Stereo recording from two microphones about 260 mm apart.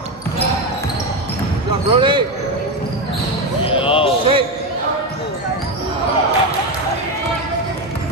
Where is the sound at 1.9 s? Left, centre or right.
Centre.